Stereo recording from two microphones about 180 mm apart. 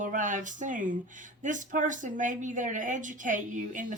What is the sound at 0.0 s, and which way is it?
Speech, 45° right (ahead or behind).